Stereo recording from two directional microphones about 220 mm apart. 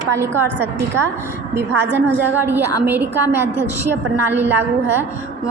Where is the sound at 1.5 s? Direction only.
10° right (ahead or behind).